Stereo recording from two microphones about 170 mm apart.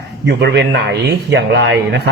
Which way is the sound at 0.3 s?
85° right.